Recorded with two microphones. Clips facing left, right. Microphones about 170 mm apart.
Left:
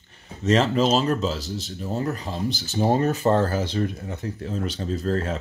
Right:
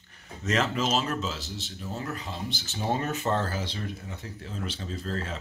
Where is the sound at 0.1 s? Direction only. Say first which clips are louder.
Left 8 dB; 30° left (ahead or behind); by 5.4 s 50° left (ahead or behind).